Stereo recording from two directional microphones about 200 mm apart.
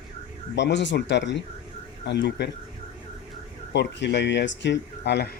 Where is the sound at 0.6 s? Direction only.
60° left (ahead or behind).